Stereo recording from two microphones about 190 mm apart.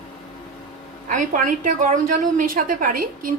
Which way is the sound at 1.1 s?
45° right (ahead or behind).